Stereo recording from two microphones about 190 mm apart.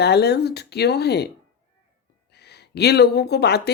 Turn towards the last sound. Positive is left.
turn(degrees=60)  # may be behind; listen again after turning